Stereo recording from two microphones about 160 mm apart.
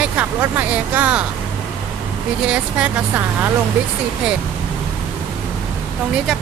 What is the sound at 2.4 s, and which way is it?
Speech, 10° right (ahead or behind).